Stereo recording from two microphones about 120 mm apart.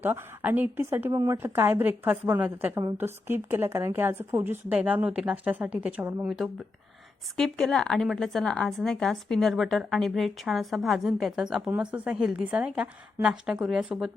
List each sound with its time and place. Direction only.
0.0 s a woman's voice: 15° right (ahead or behind)
1.1 s a woman's voice: 30° right (ahead or behind)
1.4 s a woman's voice: 20° right (ahead or behind)
6.2 s a woman's voice: centre (ahead or behind)